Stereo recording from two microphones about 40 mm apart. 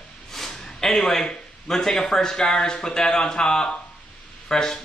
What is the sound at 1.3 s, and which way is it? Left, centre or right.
Speech, centre.